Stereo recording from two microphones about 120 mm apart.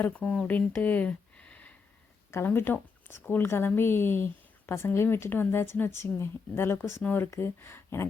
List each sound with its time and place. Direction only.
0.0 s speech: 10° left (ahead or behind)